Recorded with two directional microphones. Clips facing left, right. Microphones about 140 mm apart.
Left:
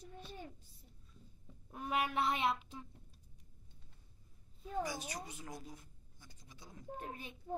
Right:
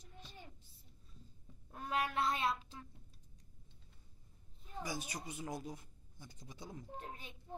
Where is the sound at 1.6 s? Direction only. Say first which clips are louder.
Left 1 dB; 15° left (ahead or behind).